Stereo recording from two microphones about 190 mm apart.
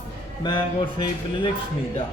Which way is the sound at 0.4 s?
25° left (ahead or behind).